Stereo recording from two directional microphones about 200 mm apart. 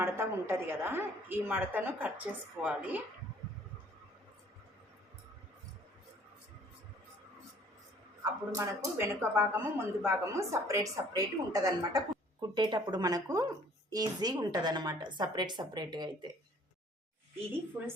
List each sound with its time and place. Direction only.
0.0 s a woman's voice: 10° right (ahead or behind)
8.2 s speech: 15° right (ahead or behind)